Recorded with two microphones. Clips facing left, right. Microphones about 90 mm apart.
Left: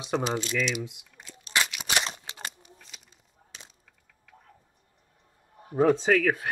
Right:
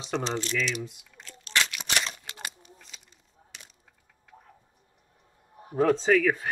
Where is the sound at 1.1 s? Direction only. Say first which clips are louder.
Even; 10° left (ahead or behind).